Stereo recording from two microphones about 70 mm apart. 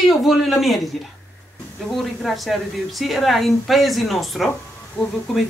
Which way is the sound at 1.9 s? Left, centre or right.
Centre.